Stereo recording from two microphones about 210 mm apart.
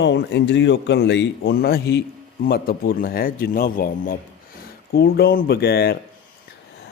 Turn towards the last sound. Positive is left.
turn(degrees=50)  # may be behind; listen again after turning